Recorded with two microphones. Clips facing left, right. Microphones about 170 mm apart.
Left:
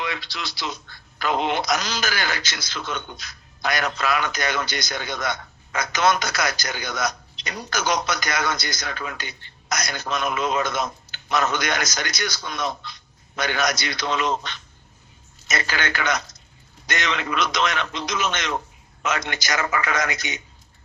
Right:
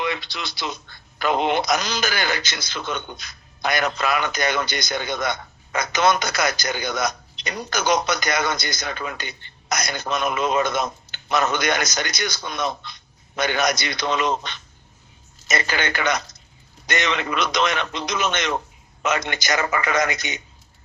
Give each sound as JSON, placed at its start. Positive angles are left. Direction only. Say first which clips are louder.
{"t": 0.0, "sound": "a man's voice", "louder": "right 3 dB", "side_deg": -20}